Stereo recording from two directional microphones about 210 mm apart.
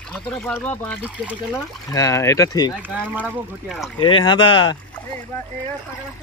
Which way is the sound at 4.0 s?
20° left (ahead or behind).